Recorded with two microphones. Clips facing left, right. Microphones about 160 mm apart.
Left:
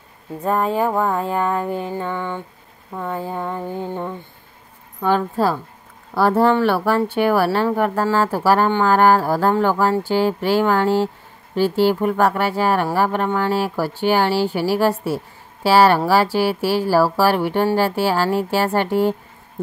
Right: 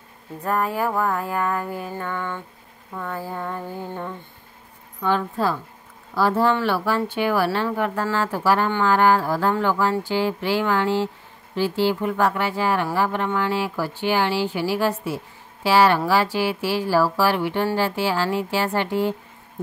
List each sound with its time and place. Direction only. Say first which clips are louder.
0.4 s a sound: left 4 dB; 20° left (ahead or behind)
5.0 s speech: left 4 dB; 40° left (ahead or behind)
6.1 s speech: left 4 dB; 55° left (ahead or behind)
6.6 s mantra: left 5 dB; 50° left (ahead or behind)
7.7 s mantra: left 5 dB; 40° left (ahead or behind)
15.6 s speech: left 3 dB; 40° left (ahead or behind)
17.7 s mantra: left 4 dB; 45° left (ahead or behind)